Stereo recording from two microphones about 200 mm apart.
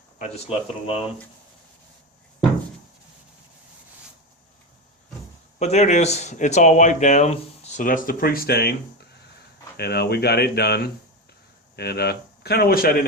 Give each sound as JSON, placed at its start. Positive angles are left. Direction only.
{"t": 0.2, "sound": "speech", "side_deg": 30}
{"t": 5.5, "sound": "speech", "side_deg": 35}
{"t": 9.7, "sound": "speech", "side_deg": 55}